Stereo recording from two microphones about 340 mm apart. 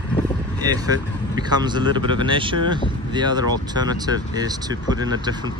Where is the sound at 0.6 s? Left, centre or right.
Centre.